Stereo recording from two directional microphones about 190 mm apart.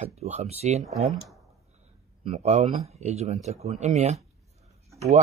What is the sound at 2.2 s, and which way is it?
Speech, 35° right (ahead or behind).